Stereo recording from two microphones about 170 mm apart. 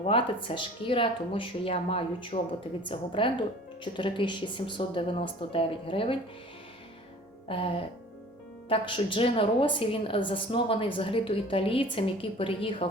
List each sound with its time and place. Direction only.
0.0 s a woman's voice: 30° left (ahead or behind)
7.4 s music: 35° left (ahead or behind)
8.7 s a woman's voice: 30° left (ahead or behind)